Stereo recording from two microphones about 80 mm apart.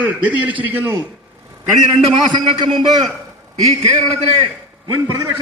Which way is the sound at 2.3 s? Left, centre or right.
Right.